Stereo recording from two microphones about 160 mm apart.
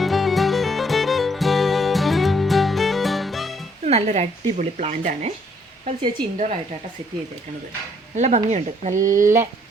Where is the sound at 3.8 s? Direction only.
40° right (ahead or behind).